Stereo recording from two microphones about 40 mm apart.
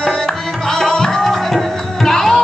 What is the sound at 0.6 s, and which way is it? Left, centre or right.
Music, centre.